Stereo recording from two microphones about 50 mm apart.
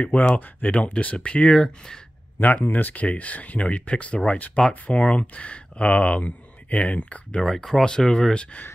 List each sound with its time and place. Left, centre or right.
0.0 s speech: left
2.3 s speech: left
7.4 s speech: centre